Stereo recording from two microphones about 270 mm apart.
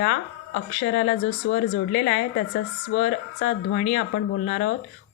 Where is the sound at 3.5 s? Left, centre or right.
Left.